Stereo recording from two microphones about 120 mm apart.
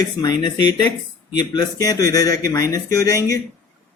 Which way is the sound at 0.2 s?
35° left (ahead or behind).